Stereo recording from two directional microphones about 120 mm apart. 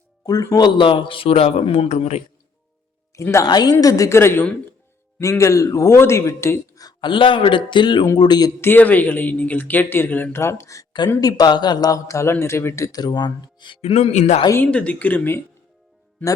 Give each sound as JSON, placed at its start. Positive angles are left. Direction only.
{"t": 0.3, "sound": "speech", "side_deg": 30}
{"t": 3.2, "sound": "a man's voice", "side_deg": 25}
{"t": 8.6, "sound": "a man's voice", "side_deg": 15}
{"t": 13.8, "sound": "speech", "side_deg": 65}
{"t": 14.5, "sound": "speech", "side_deg": 10}